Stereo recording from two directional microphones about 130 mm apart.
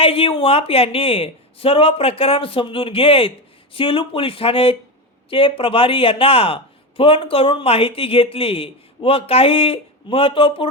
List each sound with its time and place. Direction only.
0.0 s speech: 45° left (ahead or behind)